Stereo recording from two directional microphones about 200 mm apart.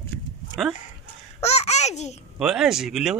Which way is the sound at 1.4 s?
30° left (ahead or behind).